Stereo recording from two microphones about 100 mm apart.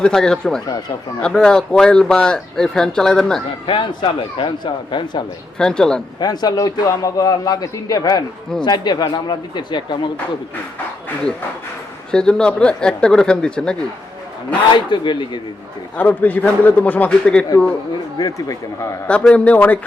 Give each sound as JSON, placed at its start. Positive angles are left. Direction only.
{"t": 0.0, "sound": "speech", "side_deg": 5}
{"t": 3.7, "sound": "speech", "side_deg": 60}
{"t": 5.5, "sound": "speech", "side_deg": 5}
{"t": 6.1, "sound": "a man's voice", "side_deg": 45}
{"t": 12.1, "sound": "speech", "side_deg": 10}
{"t": 14.8, "sound": "speech", "side_deg": 50}
{"t": 16.0, "sound": "speech", "side_deg": 15}
{"t": 18.2, "sound": "a man's voice", "side_deg": 35}
{"t": 19.0, "sound": "speech", "side_deg": 10}